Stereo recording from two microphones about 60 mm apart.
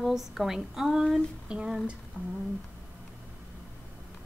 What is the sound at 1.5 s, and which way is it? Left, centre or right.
Humming, centre.